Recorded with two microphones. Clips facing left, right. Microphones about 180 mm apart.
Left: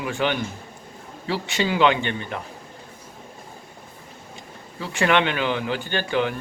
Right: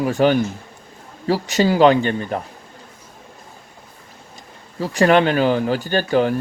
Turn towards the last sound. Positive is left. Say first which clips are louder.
# right 6 dB
turn(degrees=-40)  # may be behind; listen again after turning